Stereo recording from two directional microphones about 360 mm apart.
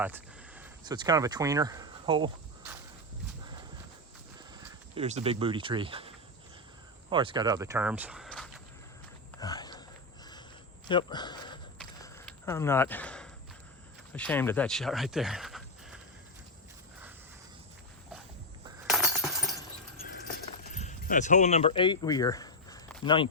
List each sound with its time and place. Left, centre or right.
0.0 s speech: centre
4.5 s speech: centre
9.4 s a sound: centre
10.8 s speech: centre
11.8 s walk: centre
14.1 s speech: centre
18.9 s a sound: centre
20.0 s a sound: left
20.7 s speech: centre